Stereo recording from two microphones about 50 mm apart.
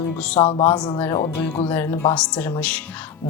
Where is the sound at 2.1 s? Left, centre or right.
Left.